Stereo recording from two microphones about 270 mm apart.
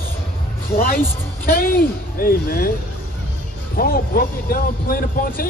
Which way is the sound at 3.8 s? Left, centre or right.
Left.